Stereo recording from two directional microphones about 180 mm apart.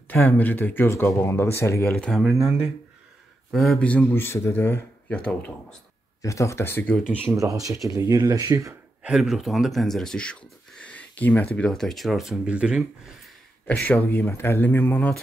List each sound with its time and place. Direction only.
0.1 s a man's voice: 10° left (ahead or behind)
1.9 s a man's voice: centre (ahead or behind)
6.2 s a man's voice: 15° left (ahead or behind)
7.1 s speech: 15° right (ahead or behind)
9.0 s speech: 5° right (ahead or behind)
13.8 s a man's voice: 10° left (ahead or behind)